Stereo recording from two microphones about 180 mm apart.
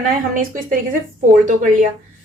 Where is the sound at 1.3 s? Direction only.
45° right (ahead or behind).